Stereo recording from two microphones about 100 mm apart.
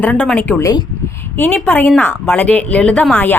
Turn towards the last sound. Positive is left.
turn(degrees=15)  # may be behind; listen again after turning